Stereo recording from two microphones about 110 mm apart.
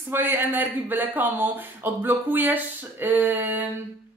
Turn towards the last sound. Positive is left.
turn(degrees=-20)  # may be behind; listen again after turning